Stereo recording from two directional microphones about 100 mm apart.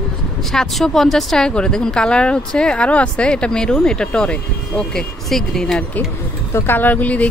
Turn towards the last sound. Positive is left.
turn(degrees=15)  # may be behind; listen again after turning